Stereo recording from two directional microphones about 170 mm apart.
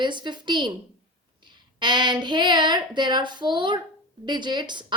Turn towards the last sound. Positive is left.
turn(degrees=-25)  # may be behind; listen again after turning